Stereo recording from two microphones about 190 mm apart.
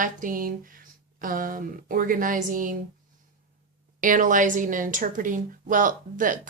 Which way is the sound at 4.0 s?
45° right (ahead or behind).